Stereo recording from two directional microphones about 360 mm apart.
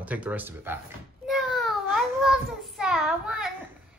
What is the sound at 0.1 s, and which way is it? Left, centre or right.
Speech, centre.